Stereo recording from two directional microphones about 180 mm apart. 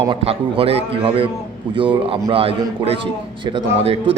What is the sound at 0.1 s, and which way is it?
A man's voice, 30° right (ahead or behind).